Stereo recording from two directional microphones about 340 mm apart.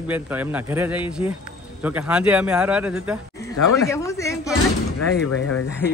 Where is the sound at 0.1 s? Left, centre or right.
Centre.